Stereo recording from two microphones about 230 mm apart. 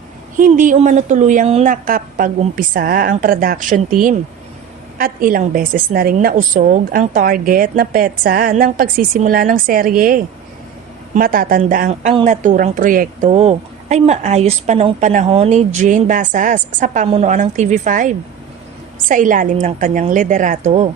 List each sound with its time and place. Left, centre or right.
0.3 s speech: right